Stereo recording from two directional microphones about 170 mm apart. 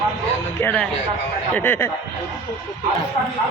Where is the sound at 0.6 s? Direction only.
5° left (ahead or behind).